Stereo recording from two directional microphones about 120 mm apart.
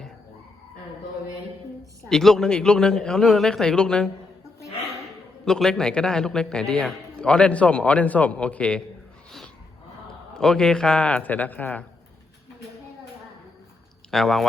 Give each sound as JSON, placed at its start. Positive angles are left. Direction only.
{"t": 1.8, "sound": "a man's voice", "side_deg": 5}
{"t": 5.5, "sound": "a man's voice", "side_deg": 5}
{"t": 10.3, "sound": "a man's voice", "side_deg": 5}
{"t": 14.1, "sound": "a man's voice", "side_deg": 0}